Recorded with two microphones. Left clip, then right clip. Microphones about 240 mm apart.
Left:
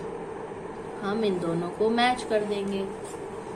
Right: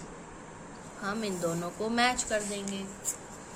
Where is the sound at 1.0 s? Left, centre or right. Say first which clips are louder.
Left 5 dB; right.